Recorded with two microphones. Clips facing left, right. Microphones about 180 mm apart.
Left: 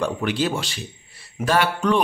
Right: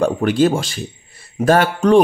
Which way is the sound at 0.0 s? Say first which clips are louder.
Right 8 dB; 45° right (ahead or behind).